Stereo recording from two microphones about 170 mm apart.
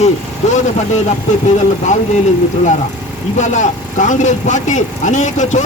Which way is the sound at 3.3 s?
45° left (ahead or behind).